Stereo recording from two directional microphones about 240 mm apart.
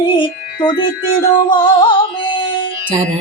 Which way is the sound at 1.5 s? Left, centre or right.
Centre.